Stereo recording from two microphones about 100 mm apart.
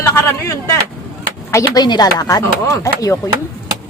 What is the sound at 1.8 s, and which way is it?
Speech, 40° left (ahead or behind).